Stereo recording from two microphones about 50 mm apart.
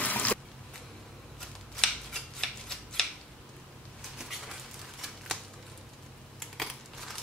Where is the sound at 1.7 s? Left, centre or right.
Centre.